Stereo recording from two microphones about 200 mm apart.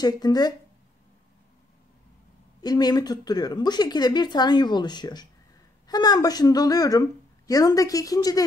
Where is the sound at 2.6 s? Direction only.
20° left (ahead or behind).